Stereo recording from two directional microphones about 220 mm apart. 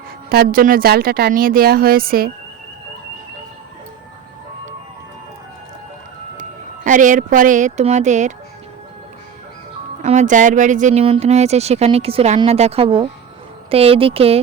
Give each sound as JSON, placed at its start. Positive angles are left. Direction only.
{"t": 0.3, "sound": "speech", "side_deg": -40}
{"t": 6.8, "sound": "speech", "side_deg": -35}
{"t": 10.0, "sound": "speech", "side_deg": -35}